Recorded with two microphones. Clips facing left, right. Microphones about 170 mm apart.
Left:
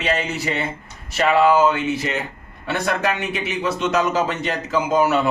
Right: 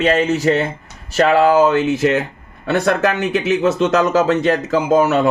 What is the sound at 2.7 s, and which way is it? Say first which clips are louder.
Speech: right 6 dB; 40° right (ahead or behind).